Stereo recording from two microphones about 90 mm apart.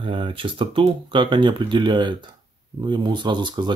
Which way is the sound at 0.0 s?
70° right (ahead or behind).